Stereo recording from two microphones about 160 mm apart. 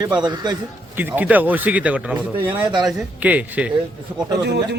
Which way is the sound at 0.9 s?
10° right (ahead or behind).